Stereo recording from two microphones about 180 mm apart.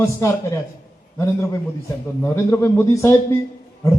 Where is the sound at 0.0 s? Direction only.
15° left (ahead or behind).